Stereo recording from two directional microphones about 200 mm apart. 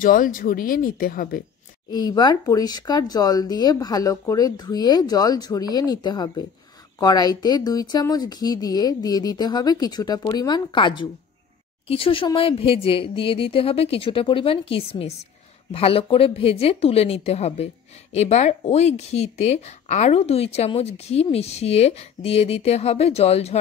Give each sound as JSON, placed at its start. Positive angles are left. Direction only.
{"t": 0.0, "sound": "speech", "side_deg": 45}
{"t": 1.9, "sound": "speech", "side_deg": 20}